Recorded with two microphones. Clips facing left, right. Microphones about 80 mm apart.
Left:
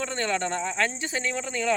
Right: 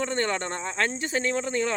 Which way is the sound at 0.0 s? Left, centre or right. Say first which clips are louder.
Right 1 dB; right.